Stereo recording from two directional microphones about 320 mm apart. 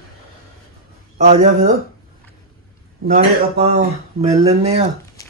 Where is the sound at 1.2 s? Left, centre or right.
Right.